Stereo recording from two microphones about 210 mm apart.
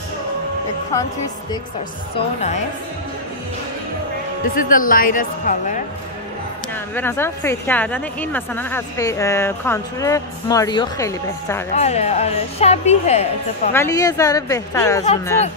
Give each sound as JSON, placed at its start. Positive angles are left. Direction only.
{"t": 2.1, "sound": "a woman's voice", "side_deg": 30}
{"t": 4.6, "sound": "a woman's voice", "side_deg": 40}
{"t": 6.7, "sound": "a woman's voice", "side_deg": 10}
{"t": 11.7, "sound": "a woman's voice", "side_deg": 30}
{"t": 13.7, "sound": "a woman's voice", "side_deg": 15}